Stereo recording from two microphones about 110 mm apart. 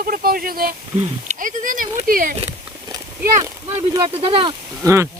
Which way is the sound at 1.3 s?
90° right.